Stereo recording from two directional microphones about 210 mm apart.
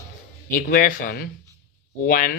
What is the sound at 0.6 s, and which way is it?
Speech, 40° left (ahead or behind).